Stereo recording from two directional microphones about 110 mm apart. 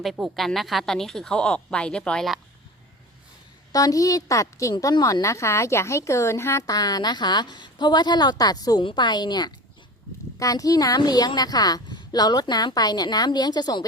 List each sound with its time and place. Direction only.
0.0 s speech: centre (ahead or behind)
3.7 s a woman's voice: 30° left (ahead or behind)